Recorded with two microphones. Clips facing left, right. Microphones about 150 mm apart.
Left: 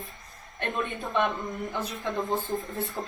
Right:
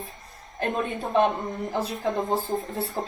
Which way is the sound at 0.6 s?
35° right (ahead or behind).